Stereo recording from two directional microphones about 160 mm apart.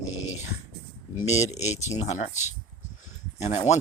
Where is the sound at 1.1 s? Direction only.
45° left (ahead or behind).